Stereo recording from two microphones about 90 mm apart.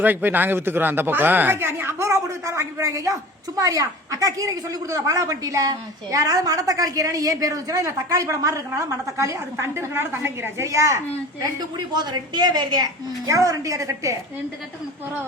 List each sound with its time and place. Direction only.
0.0 s speech: 20° right (ahead or behind)
11.3 s a woman's voice: 50° right (ahead or behind)